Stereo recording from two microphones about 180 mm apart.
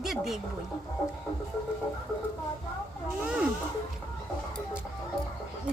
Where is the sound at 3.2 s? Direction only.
5° right (ahead or behind).